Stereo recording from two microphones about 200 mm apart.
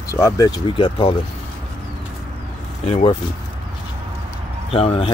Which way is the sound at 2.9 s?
30° left (ahead or behind).